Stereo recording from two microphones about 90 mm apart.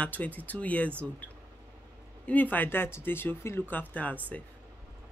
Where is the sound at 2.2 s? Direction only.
20° left (ahead or behind).